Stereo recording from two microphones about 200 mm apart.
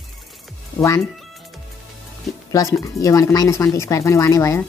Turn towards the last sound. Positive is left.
turn(degrees=15)  # may be behind; listen again after turning